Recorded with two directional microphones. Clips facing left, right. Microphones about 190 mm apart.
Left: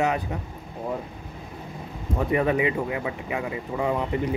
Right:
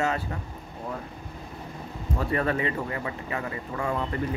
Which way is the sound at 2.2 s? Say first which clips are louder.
Left 4 dB; 15° left (ahead or behind).